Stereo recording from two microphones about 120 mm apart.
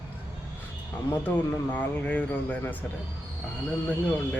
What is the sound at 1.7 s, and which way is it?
Speech, 10° left (ahead or behind).